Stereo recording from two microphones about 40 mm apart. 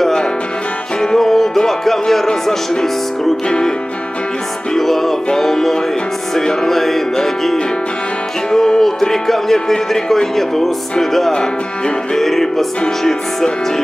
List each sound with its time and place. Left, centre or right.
0.0 s music: centre
1.7 s speech: centre
3.4 s music: left
4.7 s speech: centre